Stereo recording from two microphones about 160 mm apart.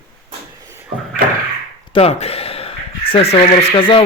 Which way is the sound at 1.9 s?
40° left (ahead or behind).